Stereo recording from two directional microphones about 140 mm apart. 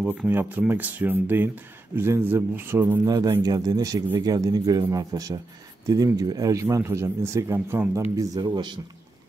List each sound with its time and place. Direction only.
0.0 s speech: 10° right (ahead or behind)
3.1 s a man's voice: 25° right (ahead or behind)